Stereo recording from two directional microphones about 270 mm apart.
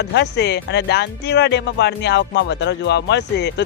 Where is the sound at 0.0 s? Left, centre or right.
Left.